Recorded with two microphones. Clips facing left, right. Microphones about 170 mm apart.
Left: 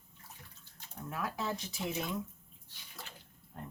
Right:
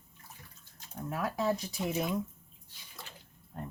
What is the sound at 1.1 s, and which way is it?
Speech, 40° right (ahead or behind).